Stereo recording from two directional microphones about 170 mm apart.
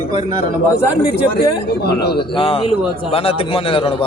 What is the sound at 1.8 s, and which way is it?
Speech, 70° left (ahead or behind).